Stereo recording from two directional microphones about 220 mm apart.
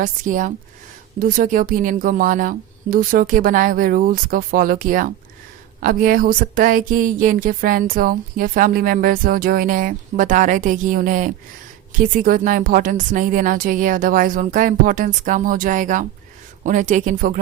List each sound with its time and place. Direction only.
0.0 s speech: 35° right (ahead or behind)